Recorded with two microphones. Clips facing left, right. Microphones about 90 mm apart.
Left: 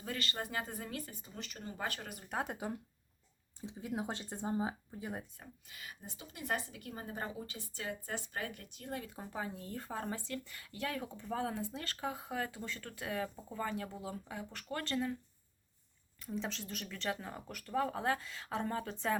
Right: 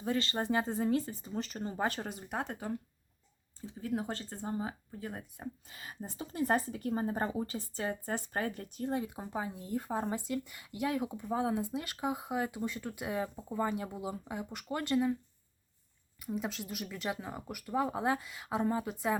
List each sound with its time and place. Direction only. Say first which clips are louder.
0.0 s speech: right 7 dB; 25° right (ahead or behind)
2.3 s speech: even; 5° left (ahead or behind)
5.4 s speech: right 8 dB; 30° right (ahead or behind); by 15.1 s 15° right (ahead or behind)
16.2 s speech: right 3 dB; 10° right (ahead or behind)